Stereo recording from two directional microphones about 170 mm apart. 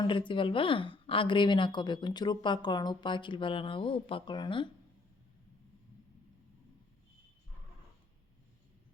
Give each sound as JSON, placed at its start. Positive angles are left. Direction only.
{"t": 0.1, "sound": "speech", "side_deg": 30}